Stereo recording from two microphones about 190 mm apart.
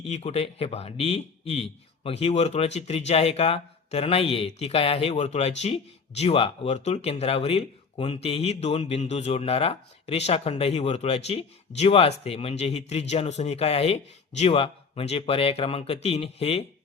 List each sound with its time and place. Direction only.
0.0 s speech: 30° left (ahead or behind)